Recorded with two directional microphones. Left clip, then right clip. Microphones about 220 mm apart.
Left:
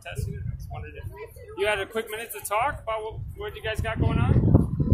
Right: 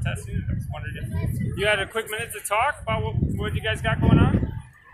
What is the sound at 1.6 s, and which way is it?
Speech, 15° left (ahead or behind).